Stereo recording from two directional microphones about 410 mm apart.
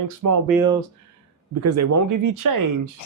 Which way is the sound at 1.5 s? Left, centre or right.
Right.